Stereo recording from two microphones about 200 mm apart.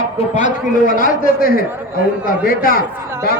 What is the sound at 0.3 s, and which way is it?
A man's voice, 40° left (ahead or behind).